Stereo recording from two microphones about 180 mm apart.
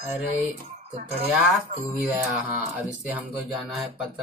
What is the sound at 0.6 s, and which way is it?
Speech, 50° right (ahead or behind).